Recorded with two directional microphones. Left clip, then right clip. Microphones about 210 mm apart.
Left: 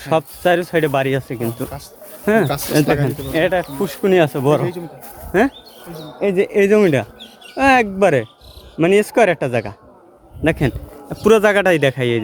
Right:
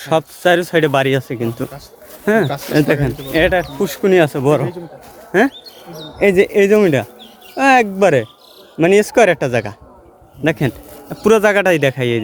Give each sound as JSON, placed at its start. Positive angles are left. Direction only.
{"t": 0.0, "sound": "speech", "side_deg": -10}
{"t": 2.2, "sound": "speech", "side_deg": 0}
{"t": 6.1, "sound": "speech", "side_deg": -30}
{"t": 6.4, "sound": "a man's voice", "side_deg": -5}